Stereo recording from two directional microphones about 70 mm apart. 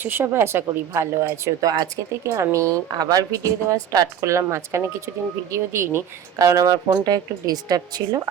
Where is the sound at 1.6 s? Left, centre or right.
Right.